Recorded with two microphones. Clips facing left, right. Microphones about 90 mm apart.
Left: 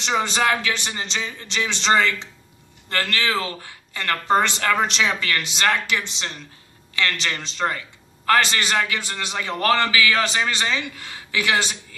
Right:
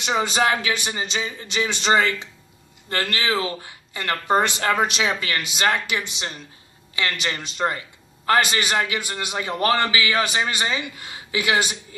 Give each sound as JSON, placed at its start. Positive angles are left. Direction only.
{"t": 0.0, "sound": "a man's voice", "side_deg": -5}
{"t": 10.2, "sound": "speech", "side_deg": -10}